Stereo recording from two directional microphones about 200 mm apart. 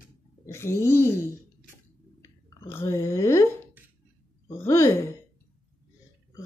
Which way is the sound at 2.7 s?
15° left (ahead or behind).